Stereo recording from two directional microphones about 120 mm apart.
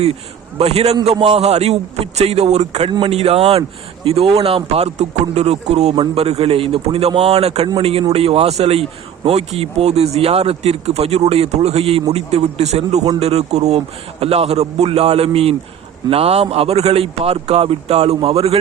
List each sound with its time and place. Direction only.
0.6 s speech: 60° right (ahead or behind)